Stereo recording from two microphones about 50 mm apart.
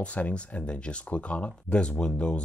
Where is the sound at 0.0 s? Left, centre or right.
Left.